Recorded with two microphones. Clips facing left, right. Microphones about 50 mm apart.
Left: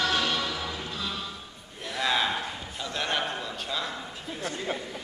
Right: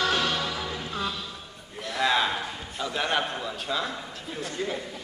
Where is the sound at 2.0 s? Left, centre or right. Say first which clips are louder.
Right 2 dB; centre.